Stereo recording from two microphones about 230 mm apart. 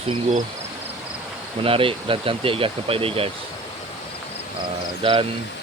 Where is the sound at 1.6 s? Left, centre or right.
Right.